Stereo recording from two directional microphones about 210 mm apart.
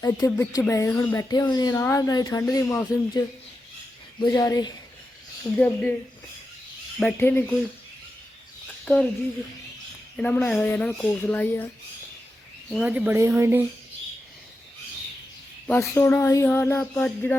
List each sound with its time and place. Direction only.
0.3 s speech: 10° left (ahead or behind)
5.5 s speech: 5° left (ahead or behind)
7.0 s speech: 10° left (ahead or behind)
8.8 s speech: centre (ahead or behind)
10.2 s speech: 5° left (ahead or behind)
12.7 s speech: 5° right (ahead or behind)
15.6 s speech: 10° left (ahead or behind)